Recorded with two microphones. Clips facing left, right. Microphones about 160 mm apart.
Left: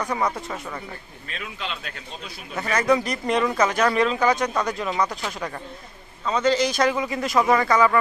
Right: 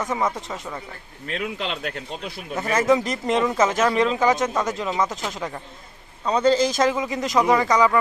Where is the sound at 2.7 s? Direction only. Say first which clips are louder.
Right 1 dB; 20° right (ahead or behind).